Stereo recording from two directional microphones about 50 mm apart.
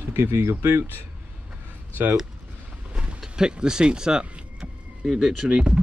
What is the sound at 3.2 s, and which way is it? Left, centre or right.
Speech, centre.